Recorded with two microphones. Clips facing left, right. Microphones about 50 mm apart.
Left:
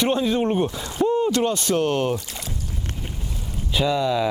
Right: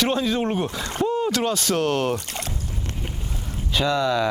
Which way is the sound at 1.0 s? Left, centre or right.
Centre.